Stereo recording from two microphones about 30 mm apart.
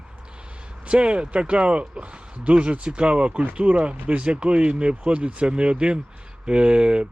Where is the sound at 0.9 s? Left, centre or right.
Right.